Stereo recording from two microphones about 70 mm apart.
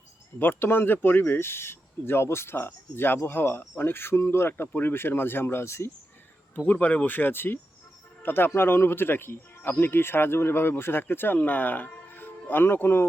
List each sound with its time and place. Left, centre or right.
0.3 s speech: left
6.6 s speech: centre